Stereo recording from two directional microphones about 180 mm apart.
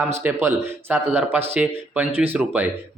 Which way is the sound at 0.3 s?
10° right (ahead or behind).